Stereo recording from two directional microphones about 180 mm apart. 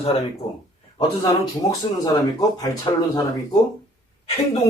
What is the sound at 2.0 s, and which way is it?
Speech, 20° left (ahead or behind).